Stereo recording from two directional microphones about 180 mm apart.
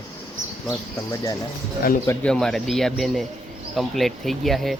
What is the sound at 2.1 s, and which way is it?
Speech, 5° left (ahead or behind).